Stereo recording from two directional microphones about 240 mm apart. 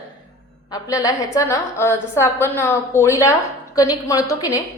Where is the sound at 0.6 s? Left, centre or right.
Centre.